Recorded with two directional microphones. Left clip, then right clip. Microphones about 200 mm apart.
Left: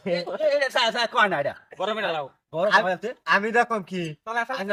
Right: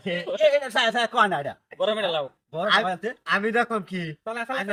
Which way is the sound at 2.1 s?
25° left (ahead or behind).